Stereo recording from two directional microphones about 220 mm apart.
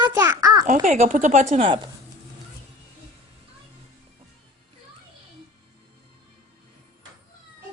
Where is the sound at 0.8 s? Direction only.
35° right (ahead or behind).